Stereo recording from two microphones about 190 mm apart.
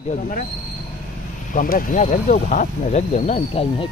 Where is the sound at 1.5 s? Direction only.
45° left (ahead or behind).